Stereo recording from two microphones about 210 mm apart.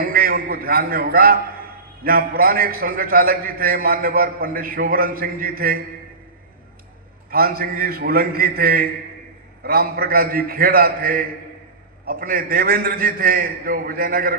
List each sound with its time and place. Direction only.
0.0 s a man's voice: 45° right (ahead or behind)
7.3 s a man's voice: 45° right (ahead or behind)